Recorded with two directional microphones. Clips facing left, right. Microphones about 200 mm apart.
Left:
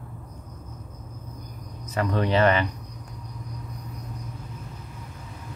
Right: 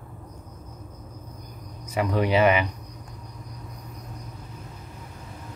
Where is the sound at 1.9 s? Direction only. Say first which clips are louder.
Right 1 dB; 10° right (ahead or behind).